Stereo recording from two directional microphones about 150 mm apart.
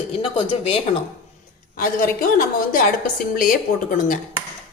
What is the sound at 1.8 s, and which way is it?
A woman's voice, 70° left (ahead or behind).